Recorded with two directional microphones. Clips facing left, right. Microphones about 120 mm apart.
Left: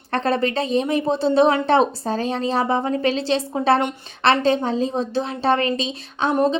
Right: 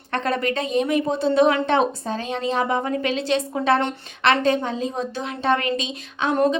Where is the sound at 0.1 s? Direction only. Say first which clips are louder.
Left 2 dB; 30° left (ahead or behind).